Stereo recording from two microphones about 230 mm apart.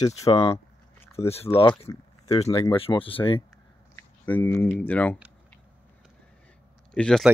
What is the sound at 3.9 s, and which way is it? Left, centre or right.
Speech, centre.